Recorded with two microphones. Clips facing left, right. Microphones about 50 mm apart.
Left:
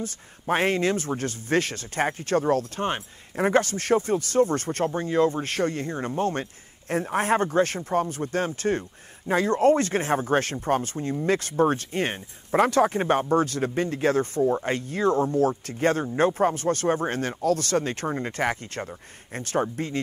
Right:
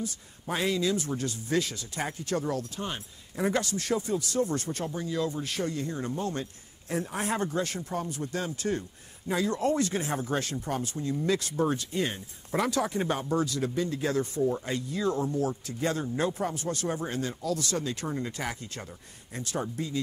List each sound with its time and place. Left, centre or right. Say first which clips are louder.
0.0 s speech: left 4 dB; left